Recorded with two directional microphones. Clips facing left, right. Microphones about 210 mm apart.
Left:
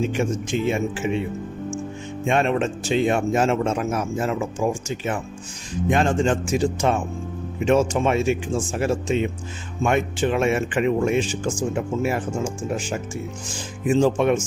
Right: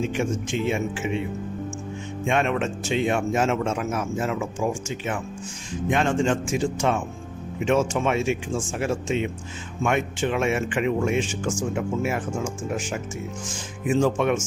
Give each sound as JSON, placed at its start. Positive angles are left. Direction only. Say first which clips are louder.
{"t": 0.1, "sound": "speech", "louder": "left 2 dB", "side_deg": 40}
{"t": 2.2, "sound": "speech", "louder": "left 3 dB", "side_deg": 35}
{"t": 12.7, "sound": "speech", "louder": "left 2 dB", "side_deg": 30}